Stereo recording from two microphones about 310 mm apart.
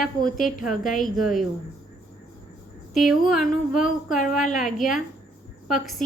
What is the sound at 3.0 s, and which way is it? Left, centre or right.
Speech, centre.